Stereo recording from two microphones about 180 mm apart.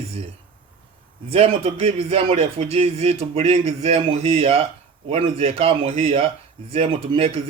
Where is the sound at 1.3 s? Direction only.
35° right (ahead or behind).